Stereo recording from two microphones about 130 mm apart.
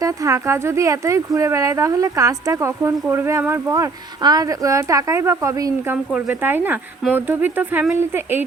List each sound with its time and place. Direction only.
0.0 s speech: 25° right (ahead or behind)
6.1 s speech: 10° right (ahead or behind)